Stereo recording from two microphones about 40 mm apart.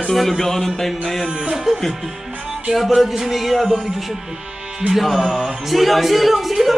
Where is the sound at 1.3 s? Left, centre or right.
Centre.